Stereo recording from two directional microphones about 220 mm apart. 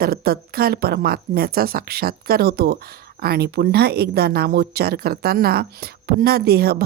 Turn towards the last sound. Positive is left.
turn(degrees=-45)  # may be behind; listen again after turning